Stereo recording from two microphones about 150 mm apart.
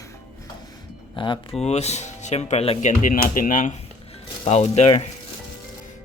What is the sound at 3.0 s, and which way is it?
Speech, 70° left (ahead or behind).